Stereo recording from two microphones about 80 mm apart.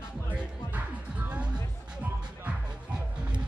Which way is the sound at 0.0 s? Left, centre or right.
Centre.